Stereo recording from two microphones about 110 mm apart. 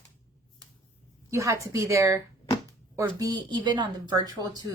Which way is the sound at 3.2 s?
40° right (ahead or behind).